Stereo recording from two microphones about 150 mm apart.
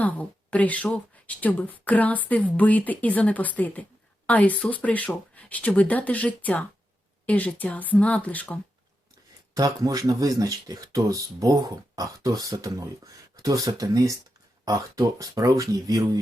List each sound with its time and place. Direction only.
0.0 s speech: 10° left (ahead or behind)
9.6 s speech: 25° right (ahead or behind)